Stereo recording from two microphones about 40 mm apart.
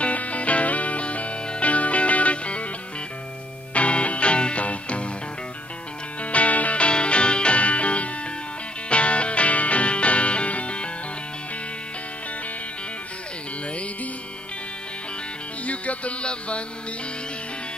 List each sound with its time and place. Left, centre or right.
0.0 s music: left
3.7 s music: left
6.2 s music: left
15.6 s music: left